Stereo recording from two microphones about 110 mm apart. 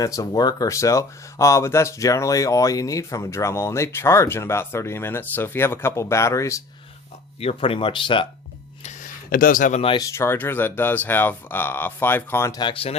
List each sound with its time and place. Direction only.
0.0 s speech: 35° left (ahead or behind)
7.3 s speech: 60° left (ahead or behind)
10.0 s speech: 25° left (ahead or behind)
12.5 s speech: 40° left (ahead or behind)
12.7 s speech: 60° left (ahead or behind)